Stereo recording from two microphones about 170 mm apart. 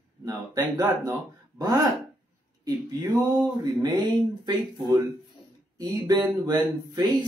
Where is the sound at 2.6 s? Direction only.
15° right (ahead or behind).